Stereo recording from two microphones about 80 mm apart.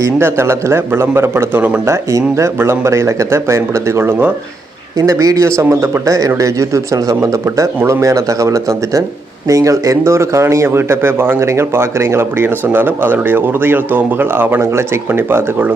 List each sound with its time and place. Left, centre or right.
0.0 s speech: right
4.9 s speech: right